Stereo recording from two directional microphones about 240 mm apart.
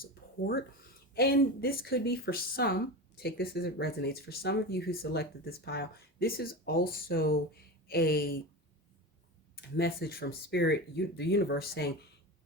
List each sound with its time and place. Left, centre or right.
0.0 s a sound: left
1.1 s speech: left
9.6 s speech: left